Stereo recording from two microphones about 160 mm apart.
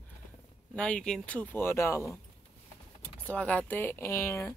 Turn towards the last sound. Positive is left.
turn(degrees=20)  # may be behind; listen again after turning